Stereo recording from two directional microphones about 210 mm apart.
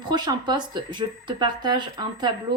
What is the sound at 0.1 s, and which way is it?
Speech, 20° right (ahead or behind).